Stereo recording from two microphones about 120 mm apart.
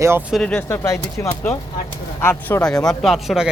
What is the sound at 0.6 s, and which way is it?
Speech, 20° left (ahead or behind).